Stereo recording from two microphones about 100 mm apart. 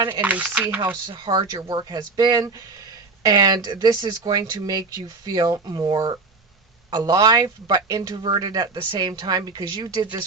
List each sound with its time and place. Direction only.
0.2 s speech: 15° right (ahead or behind)
1.0 s speech: 50° right (ahead or behind)